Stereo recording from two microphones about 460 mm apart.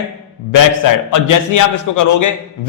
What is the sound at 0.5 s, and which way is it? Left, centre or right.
A man's voice, left.